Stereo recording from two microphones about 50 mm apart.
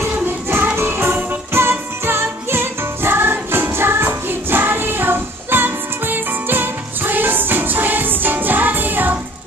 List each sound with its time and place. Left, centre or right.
0.0 s music: right